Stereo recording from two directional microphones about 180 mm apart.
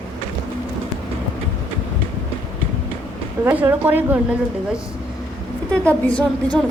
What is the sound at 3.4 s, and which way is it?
Speech, 10° right (ahead or behind).